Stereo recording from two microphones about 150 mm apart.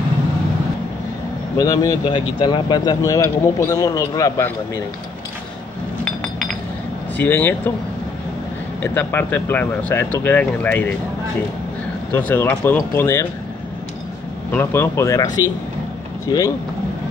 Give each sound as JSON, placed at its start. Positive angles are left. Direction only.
{"t": 1.6, "sound": "speech", "side_deg": 25}
{"t": 6.0, "sound": "chink", "side_deg": 5}
{"t": 7.2, "sound": "speech", "side_deg": 10}
{"t": 8.8, "sound": "speech", "side_deg": 15}
{"t": 12.1, "sound": "speech", "side_deg": 10}
{"t": 14.5, "sound": "speech", "side_deg": 15}